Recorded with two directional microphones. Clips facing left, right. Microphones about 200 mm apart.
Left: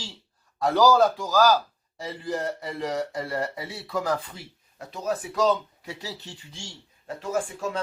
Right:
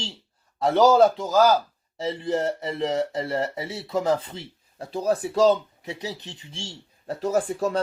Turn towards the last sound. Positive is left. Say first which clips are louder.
# right 5 dB
turn(degrees=-35)  # may be behind; listen again after turning